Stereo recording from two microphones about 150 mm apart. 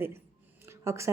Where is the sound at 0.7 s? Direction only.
20° right (ahead or behind).